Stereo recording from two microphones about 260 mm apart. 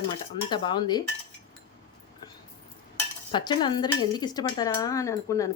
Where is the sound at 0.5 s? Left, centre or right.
Centre.